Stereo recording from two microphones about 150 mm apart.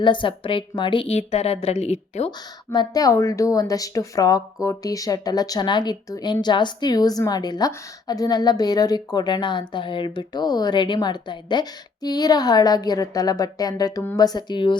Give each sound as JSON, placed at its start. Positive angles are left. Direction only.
{"t": 0.0, "sound": "a woman's voice", "side_deg": 35}
{"t": 2.7, "sound": "speech", "side_deg": 25}